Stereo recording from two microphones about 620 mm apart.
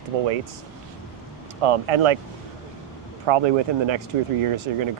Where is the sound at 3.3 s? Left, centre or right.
Right.